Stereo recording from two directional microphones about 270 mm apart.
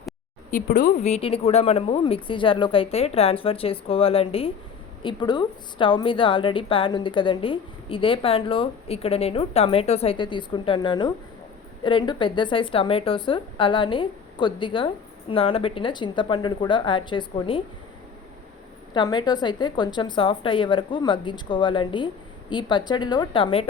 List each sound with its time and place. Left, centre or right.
0.5 s a woman's voice: left
18.9 s speech: centre